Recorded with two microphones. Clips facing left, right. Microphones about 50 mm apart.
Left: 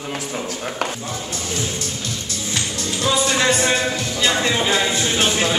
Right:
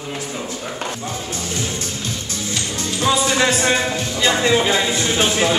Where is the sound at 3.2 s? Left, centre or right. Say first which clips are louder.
Right 1 dB; centre.